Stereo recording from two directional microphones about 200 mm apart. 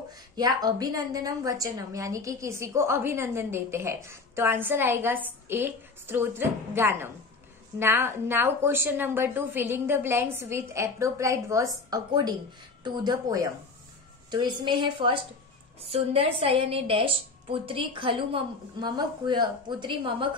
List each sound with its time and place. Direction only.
0.1 s a woman's voice: 20° right (ahead or behind)